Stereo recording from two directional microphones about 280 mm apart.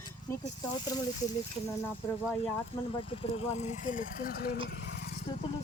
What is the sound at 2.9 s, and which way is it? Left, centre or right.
Speech, centre.